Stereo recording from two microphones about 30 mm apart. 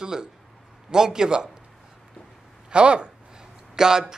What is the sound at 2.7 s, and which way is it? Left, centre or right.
Speech, right.